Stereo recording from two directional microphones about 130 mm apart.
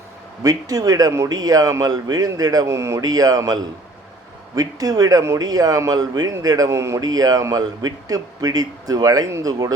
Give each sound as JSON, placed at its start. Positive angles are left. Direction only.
{"t": 0.4, "sound": "a man's voice", "side_deg": -30}